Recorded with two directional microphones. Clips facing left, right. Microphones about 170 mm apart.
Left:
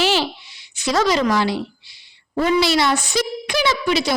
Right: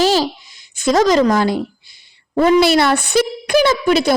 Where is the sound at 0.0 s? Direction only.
40° right (ahead or behind).